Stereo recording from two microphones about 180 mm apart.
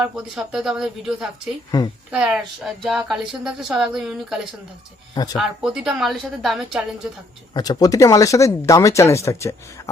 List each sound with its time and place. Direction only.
0.0 s speech: centre (ahead or behind)
5.1 s speech: 20° left (ahead or behind)
5.4 s speech: centre (ahead or behind)
7.5 s speech: 20° left (ahead or behind)